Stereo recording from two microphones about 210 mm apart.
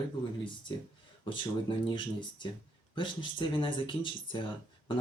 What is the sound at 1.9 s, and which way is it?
Speech, 20° left (ahead or behind).